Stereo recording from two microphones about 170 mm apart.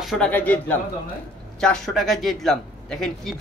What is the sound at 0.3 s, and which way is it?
A man's voice, 10° left (ahead or behind).